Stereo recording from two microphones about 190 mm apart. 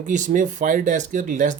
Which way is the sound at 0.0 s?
40° right (ahead or behind).